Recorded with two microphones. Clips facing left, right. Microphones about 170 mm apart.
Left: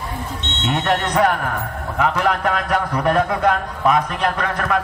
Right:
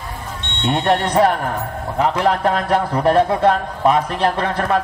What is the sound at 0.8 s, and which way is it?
A man's voice, 30° right (ahead or behind).